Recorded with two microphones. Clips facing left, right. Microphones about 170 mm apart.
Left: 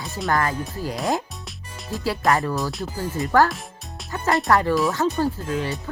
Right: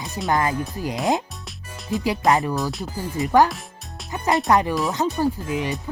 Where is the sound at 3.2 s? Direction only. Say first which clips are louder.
Right 2 dB; 15° right (ahead or behind).